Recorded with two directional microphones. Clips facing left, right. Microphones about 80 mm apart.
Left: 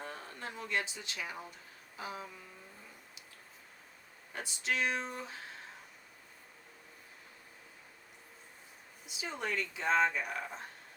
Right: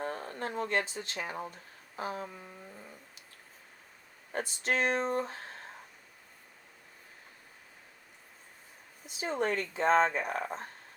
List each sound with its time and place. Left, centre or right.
0.0 s speech: right
2.0 s a sound: right
4.3 s speech: right
9.0 s speech: right